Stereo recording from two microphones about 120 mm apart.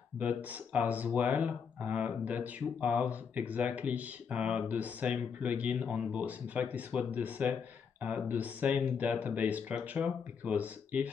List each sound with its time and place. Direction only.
0.2 s speech: 15° right (ahead or behind)